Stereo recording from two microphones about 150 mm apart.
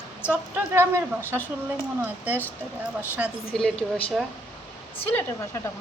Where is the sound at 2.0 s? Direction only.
10° right (ahead or behind).